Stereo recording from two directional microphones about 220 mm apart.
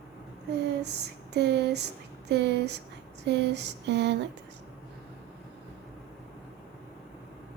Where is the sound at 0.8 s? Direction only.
50° right (ahead or behind).